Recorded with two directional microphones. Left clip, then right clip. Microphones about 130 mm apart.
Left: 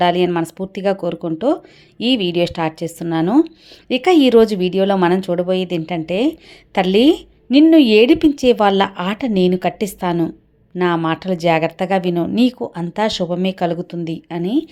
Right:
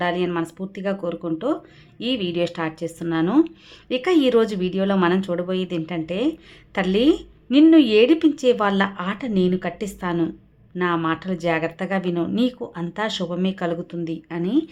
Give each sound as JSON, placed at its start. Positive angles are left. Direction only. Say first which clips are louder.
{"t": 0.0, "sound": "a woman's voice", "louder": "left 7 dB", "side_deg": 45}